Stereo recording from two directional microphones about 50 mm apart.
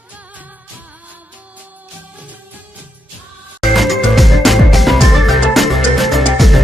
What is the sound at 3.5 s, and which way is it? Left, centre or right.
Music, centre.